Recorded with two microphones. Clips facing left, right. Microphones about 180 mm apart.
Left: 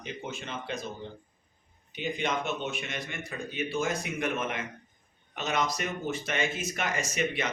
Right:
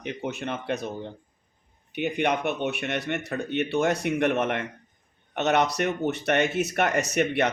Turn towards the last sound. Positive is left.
turn(degrees=-65)  # may be behind; listen again after turning